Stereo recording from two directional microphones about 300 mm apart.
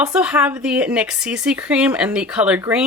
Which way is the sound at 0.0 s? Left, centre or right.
Centre.